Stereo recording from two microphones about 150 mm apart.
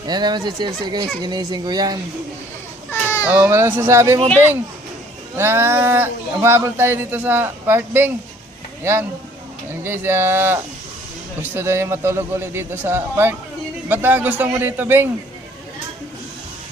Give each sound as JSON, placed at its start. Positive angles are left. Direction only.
{"t": 0.0, "sound": "speech", "side_deg": -30}
{"t": 2.9, "sound": "a sound", "side_deg": 15}
{"t": 3.2, "sound": "speech", "side_deg": -10}
{"t": 5.4, "sound": "speech", "side_deg": -15}